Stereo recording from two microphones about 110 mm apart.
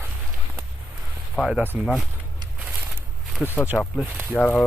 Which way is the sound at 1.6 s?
15° right (ahead or behind).